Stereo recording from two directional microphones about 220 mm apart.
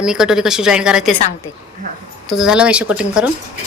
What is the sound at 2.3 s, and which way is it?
Speech, centre (ahead or behind).